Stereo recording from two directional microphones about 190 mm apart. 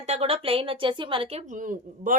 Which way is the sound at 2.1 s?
45° right (ahead or behind).